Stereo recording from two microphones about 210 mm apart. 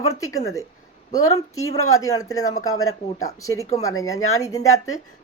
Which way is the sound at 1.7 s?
15° left (ahead or behind).